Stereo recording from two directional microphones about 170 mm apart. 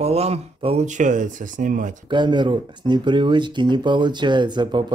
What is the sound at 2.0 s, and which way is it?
Speech, 25° right (ahead or behind).